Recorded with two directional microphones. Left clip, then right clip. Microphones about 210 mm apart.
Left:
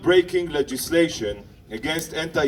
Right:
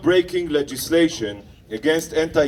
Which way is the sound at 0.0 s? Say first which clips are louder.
Even; 35° right (ahead or behind).